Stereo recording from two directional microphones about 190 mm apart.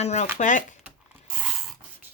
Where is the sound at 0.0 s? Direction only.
35° left (ahead or behind).